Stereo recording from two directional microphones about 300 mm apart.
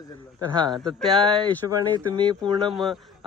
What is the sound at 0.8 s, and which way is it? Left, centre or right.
Speech, centre.